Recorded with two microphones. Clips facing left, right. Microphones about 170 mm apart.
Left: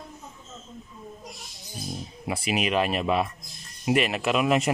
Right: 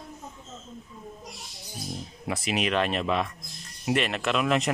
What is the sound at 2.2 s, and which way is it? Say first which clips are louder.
Speech: left 1 dB; 5° left (ahead or behind).